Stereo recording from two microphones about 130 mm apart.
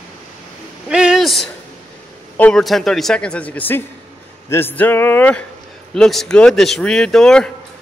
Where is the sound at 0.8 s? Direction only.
5° right (ahead or behind).